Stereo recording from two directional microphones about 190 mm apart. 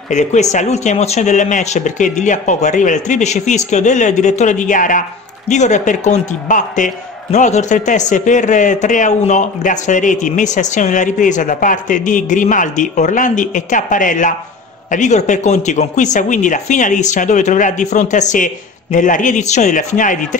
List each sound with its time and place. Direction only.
0.1 s a man's voice: 40° left (ahead or behind)